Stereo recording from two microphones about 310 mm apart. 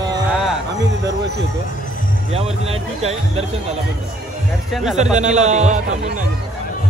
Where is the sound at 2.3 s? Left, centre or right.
Centre.